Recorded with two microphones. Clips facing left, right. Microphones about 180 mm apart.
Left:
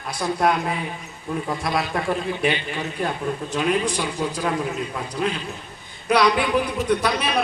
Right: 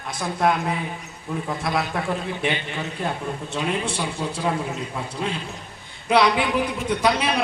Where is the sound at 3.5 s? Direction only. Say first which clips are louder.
Left 3 dB; 25° right (ahead or behind).